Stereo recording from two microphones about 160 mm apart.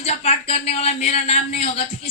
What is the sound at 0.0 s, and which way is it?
Speech, 40° left (ahead or behind).